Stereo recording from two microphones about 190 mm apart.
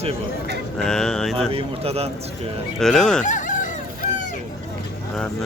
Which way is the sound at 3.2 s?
40° left (ahead or behind).